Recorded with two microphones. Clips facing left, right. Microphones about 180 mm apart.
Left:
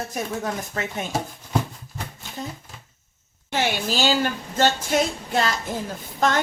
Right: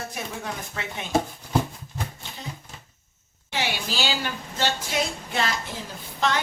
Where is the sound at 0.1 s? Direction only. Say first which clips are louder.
Left 6 dB; 45° left (ahead or behind).